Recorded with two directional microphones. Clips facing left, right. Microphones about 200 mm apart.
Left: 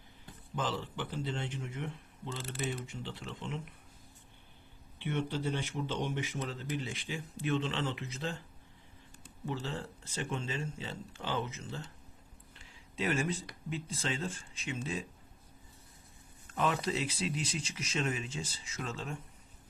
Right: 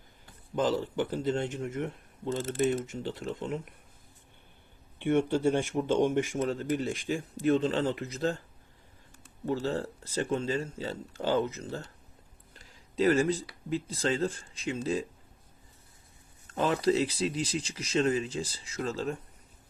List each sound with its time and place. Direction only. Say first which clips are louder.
0.5 s speech: right 9 dB; 40° right (ahead or behind)
4.9 s speech: right 9 dB; 50° right (ahead or behind)
9.5 s speech: right 8 dB; 40° right (ahead or behind)
12.5 s a sound: right 10 dB; 40° right (ahead or behind)
13.7 s speech: right 8 dB; 35° right (ahead or behind)
16.6 s speech: right 7 dB; 35° right (ahead or behind)